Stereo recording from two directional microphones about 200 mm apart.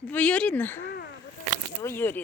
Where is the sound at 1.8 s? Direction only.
10° left (ahead or behind).